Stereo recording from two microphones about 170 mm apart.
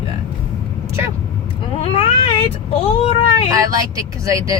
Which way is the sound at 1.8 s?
35° left (ahead or behind).